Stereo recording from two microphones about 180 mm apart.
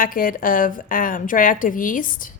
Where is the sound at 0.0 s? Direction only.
50° left (ahead or behind).